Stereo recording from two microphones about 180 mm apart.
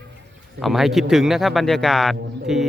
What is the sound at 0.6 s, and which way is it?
A man's voice, centre (ahead or behind).